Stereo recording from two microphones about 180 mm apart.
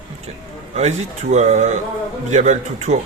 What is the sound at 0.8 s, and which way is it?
Speech, 40° right (ahead or behind).